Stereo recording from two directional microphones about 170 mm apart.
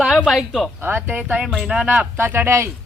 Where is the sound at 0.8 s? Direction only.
10° right (ahead or behind).